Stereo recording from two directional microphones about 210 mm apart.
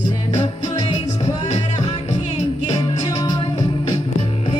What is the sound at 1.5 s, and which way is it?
Music, 30° left (ahead or behind).